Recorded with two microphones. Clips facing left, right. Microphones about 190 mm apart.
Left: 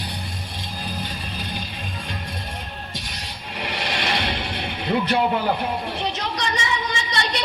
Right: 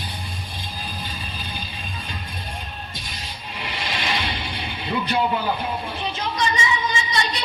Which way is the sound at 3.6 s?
70° left (ahead or behind).